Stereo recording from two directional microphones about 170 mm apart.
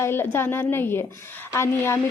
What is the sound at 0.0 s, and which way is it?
Speech, 15° left (ahead or behind).